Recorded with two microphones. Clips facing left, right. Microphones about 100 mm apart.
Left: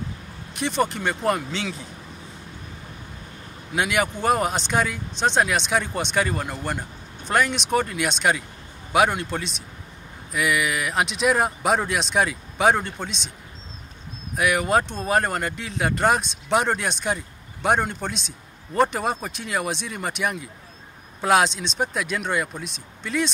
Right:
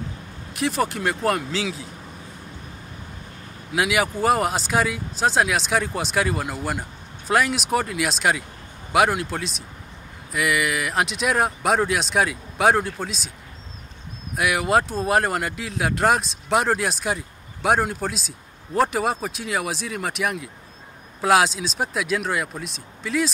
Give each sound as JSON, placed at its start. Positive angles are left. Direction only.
{"t": 0.5, "sound": "speech", "side_deg": 0}
{"t": 3.7, "sound": "speech", "side_deg": 0}
{"t": 14.3, "sound": "speech", "side_deg": 0}